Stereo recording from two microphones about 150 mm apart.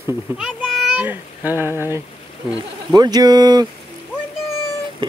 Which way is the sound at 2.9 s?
25° right (ahead or behind).